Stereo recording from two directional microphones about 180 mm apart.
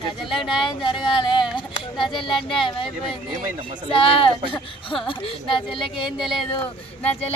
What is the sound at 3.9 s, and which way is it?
Speech, 30° left (ahead or behind).